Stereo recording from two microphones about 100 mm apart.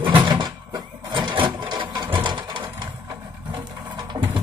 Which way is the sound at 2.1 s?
55° right (ahead or behind).